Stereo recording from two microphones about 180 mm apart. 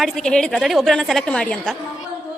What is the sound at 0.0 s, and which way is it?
A woman's voice, 5° left (ahead or behind).